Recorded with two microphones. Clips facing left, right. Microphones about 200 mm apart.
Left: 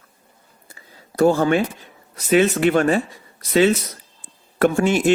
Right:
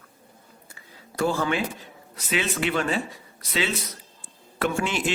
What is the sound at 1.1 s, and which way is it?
Speech, 45° left (ahead or behind).